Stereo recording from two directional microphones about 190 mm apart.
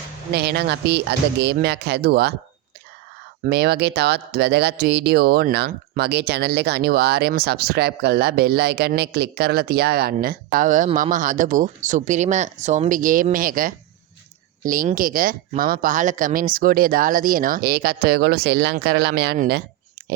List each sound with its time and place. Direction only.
0.3 s speech: 55° right (ahead or behind)
3.4 s speech: 60° right (ahead or behind)
20.0 s typing: 55° right (ahead or behind)